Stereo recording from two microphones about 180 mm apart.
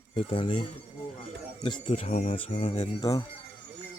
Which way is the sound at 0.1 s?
30° left (ahead or behind).